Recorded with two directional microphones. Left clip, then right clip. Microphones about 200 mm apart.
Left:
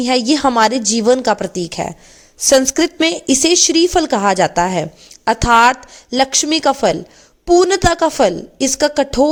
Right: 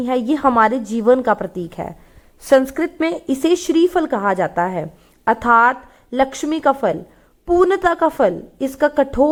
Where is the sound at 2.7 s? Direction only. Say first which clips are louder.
Left 5 dB; 40° left (ahead or behind).